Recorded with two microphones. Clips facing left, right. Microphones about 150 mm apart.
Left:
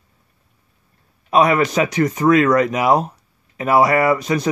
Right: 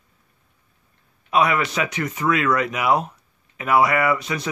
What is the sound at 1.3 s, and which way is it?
Speech, 40° left (ahead or behind).